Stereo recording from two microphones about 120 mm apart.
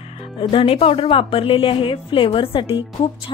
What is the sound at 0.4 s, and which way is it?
A woman's voice, 45° left (ahead or behind).